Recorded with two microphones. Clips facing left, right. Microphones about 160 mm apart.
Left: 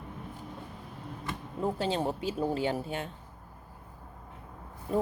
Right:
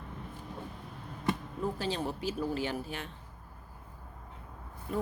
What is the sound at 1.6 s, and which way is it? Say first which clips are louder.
Speech: left 4 dB; 30° left (ahead or behind).